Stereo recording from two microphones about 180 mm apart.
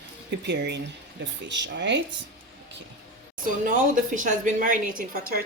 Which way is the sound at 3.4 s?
45° right (ahead or behind).